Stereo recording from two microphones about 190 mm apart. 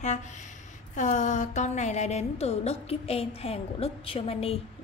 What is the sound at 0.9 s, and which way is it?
A woman's voice, 40° left (ahead or behind).